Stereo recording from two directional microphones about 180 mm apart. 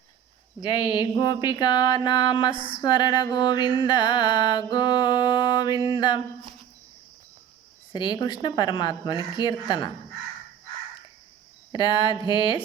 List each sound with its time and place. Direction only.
0.6 s music: 25° left (ahead or behind)
2.6 s a sound: 25° right (ahead or behind)
2.8 s music: 25° left (ahead or behind)
7.9 s music: 25° left (ahead or behind)
11.7 s music: 25° left (ahead or behind)